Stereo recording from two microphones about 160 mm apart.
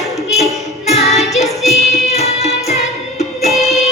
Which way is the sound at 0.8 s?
40° left (ahead or behind).